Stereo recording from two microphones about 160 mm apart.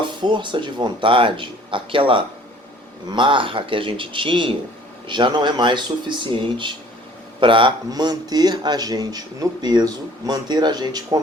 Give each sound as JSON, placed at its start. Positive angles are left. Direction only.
{"t": 0.2, "sound": "speech", "side_deg": -30}